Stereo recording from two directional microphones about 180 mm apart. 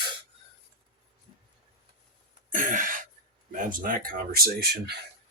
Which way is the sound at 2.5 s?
50° right (ahead or behind).